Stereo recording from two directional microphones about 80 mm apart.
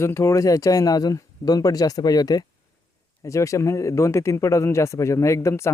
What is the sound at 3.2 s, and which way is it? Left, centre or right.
A man's voice, left.